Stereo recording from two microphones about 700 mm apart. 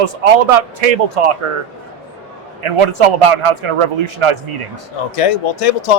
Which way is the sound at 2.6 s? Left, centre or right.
Right.